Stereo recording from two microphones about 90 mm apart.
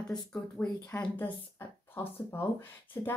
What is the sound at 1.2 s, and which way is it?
A woman's voice, 25° left (ahead or behind).